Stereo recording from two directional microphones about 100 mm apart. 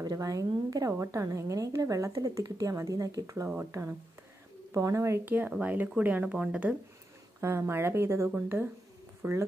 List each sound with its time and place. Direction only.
0.0 s speech: 35° right (ahead or behind)
5.3 s speech: 15° right (ahead or behind)
7.3 s speech: 25° right (ahead or behind)